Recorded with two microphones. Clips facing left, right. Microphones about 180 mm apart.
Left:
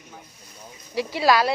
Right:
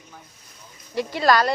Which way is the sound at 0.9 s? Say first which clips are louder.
Even; centre (ahead or behind).